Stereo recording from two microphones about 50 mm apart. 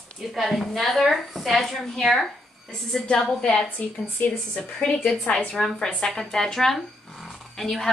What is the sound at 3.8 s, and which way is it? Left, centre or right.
Speech, left.